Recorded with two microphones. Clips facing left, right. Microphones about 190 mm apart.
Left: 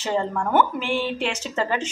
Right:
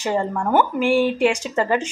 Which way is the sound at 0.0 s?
15° right (ahead or behind).